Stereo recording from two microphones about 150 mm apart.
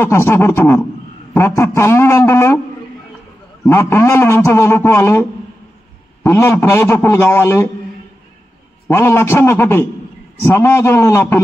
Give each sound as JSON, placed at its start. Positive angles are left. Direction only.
{"t": 0.0, "sound": "a man's voice", "side_deg": 15}
{"t": 3.6, "sound": "a man's voice", "side_deg": 15}
{"t": 6.2, "sound": "a man's voice", "side_deg": 20}
{"t": 8.8, "sound": "a man's voice", "side_deg": 15}